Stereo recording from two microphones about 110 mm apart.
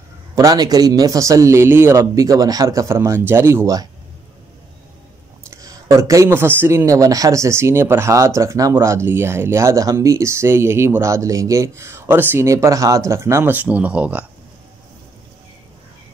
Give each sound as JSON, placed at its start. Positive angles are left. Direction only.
{"t": 0.4, "sound": "a man's voice", "side_deg": -35}
{"t": 5.5, "sound": "speech", "side_deg": -30}